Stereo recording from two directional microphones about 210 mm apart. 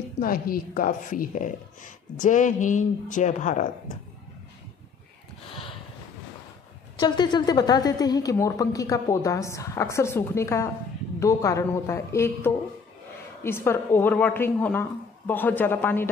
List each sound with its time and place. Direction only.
0.2 s a woman's voice: 45° left (ahead or behind)
5.5 s a sound: 25° left (ahead or behind)
7.0 s a woman's voice: 20° left (ahead or behind)